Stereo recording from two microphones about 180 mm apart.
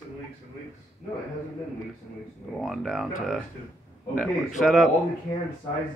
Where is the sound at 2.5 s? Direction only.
Centre (ahead or behind).